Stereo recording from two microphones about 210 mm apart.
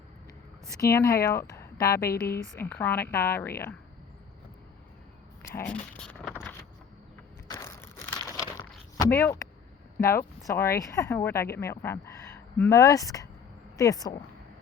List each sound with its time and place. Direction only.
0.9 s speech: 15° left (ahead or behind)
2.0 s a woman's voice: 50° left (ahead or behind)
2.6 s speech: 10° left (ahead or behind)
5.5 s keys jangling: 10° left (ahead or behind)
7.4 s a sound: 15° left (ahead or behind)
10.0 s speech: 15° left (ahead or behind)